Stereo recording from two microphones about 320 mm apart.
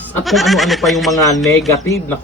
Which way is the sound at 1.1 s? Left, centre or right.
Centre.